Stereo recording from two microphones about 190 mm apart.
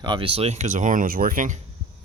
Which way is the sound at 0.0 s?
25° right (ahead or behind).